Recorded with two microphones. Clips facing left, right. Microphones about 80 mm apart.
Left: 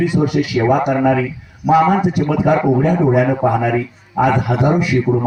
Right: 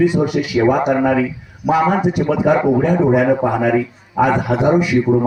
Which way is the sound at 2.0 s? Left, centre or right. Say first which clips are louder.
Even; right.